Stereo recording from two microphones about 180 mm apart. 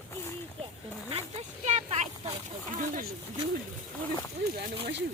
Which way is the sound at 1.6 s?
40° right (ahead or behind).